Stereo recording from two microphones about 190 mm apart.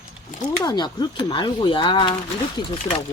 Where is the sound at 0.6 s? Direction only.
25° left (ahead or behind).